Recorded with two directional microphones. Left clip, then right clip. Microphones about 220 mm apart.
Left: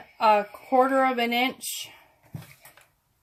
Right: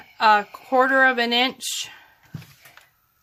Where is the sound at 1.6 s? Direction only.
50° right (ahead or behind).